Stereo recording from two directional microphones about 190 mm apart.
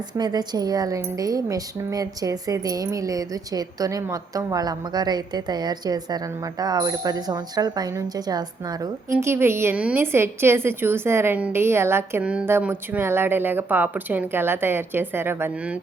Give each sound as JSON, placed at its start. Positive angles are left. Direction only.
{"t": 0.1, "sound": "a woman's voice", "side_deg": -20}